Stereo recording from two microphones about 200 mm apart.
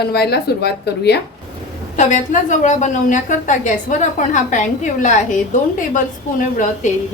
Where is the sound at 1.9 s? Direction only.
40° left (ahead or behind).